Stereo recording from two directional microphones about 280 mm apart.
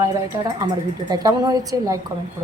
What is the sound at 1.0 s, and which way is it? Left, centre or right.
Speech, centre.